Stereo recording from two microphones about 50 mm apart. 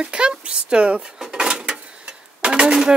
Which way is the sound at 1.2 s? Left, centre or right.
Centre.